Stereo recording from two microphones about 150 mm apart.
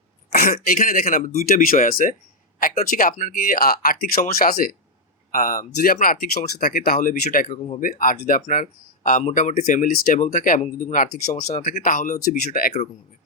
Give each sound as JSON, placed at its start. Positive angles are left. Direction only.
{"t": 0.3, "sound": "speech", "side_deg": 80}
{"t": 5.3, "sound": "speech", "side_deg": 65}